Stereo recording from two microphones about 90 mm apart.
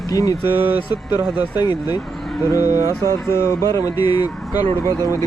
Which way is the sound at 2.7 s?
35° right (ahead or behind).